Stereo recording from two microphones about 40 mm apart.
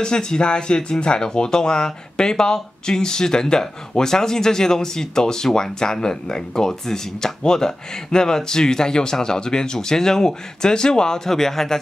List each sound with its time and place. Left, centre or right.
0.0 s speech: centre